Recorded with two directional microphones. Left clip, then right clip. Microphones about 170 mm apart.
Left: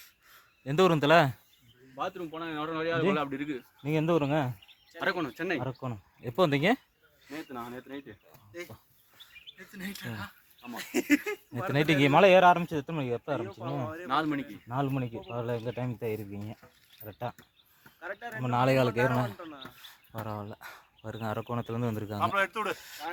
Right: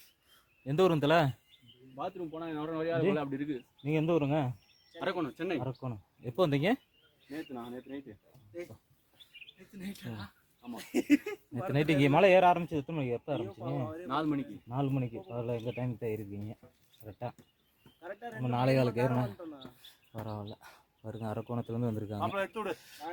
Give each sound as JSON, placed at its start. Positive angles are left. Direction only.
{"t": 0.6, "sound": "speech", "side_deg": 30}
{"t": 2.0, "sound": "a man's voice", "side_deg": -10}
{"t": 3.8, "sound": "speech", "side_deg": 35}
{"t": 4.9, "sound": "speech", "side_deg": 10}
{"t": 5.6, "sound": "speech", "side_deg": 35}
{"t": 7.7, "sound": "speech", "side_deg": 10}
{"t": 9.7, "sound": "speech", "side_deg": -5}
{"t": 11.7, "sound": "speech", "side_deg": 30}
{"t": 13.9, "sound": "speech", "side_deg": 0}
{"t": 14.7, "sound": "speech", "side_deg": 30}
{"t": 18.0, "sound": "speech", "side_deg": -5}
{"t": 18.4, "sound": "speech", "side_deg": 25}
{"t": 20.5, "sound": "speech", "side_deg": 15}